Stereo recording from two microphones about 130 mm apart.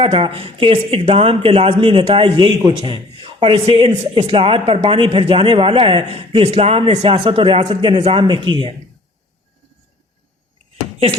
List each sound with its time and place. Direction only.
0.0 s a man's voice: 45° right (ahead or behind)
8.2 s a man's voice: 35° right (ahead or behind)